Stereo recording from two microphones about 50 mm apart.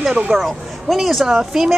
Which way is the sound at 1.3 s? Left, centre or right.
Centre.